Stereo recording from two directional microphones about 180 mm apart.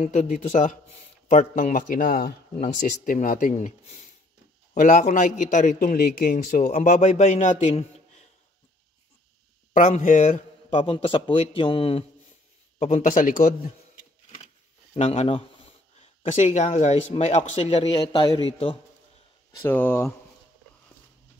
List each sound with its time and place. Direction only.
0.0 s a man's voice: 45° left (ahead or behind)
9.8 s a man's voice: 45° left (ahead or behind)
10.8 s speech: 30° left (ahead or behind)
12.7 s a man's voice: 40° left (ahead or behind)
15.0 s speech: 35° left (ahead or behind)
19.6 s speech: 10° left (ahead or behind)